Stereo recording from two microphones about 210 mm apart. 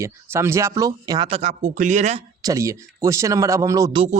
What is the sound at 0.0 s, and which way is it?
Speech, 15° right (ahead or behind).